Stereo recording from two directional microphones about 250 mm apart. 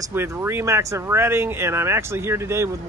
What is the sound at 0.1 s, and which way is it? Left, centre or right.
Speech, centre.